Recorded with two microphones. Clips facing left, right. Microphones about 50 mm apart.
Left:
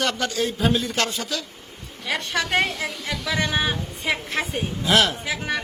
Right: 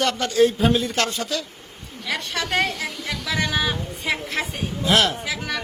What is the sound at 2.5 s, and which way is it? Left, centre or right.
Speech, centre.